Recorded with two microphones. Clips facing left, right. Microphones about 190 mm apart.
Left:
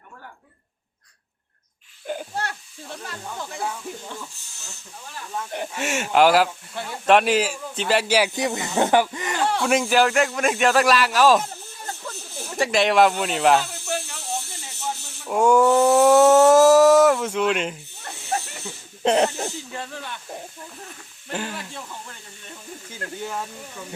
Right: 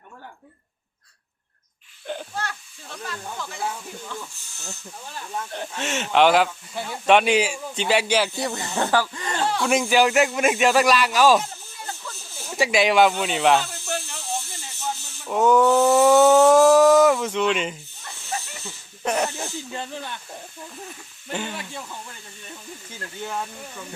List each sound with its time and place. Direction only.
2.1 s a sound: 10° left (ahead or behind)
5.5 s speech: 10° left (ahead or behind)
9.6 s speech: centre (ahead or behind)
12.5 s speech: centre (ahead or behind)
15.3 s a sound: 10° left (ahead or behind)
18.0 s snake: 55° left (ahead or behind)
19.0 s snake: 30° left (ahead or behind)
19.7 s speech: 20° right (ahead or behind)
21.2 s speech: centre (ahead or behind)
23.2 s speech: 5° left (ahead or behind)